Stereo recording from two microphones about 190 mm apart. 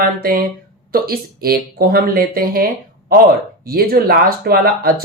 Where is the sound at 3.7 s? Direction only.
50° right (ahead or behind).